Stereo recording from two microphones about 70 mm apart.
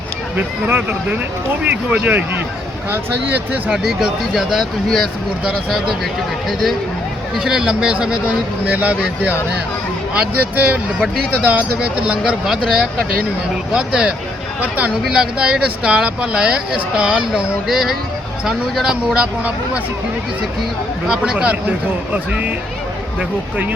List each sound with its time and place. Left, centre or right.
0.3 s speech: right
3.7 s speech: centre
6.5 s speech: centre; by 9.0 s right
10.2 s speech: right
21.1 s speech: centre